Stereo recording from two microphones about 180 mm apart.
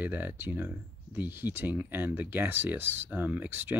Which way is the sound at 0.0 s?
10° right (ahead or behind).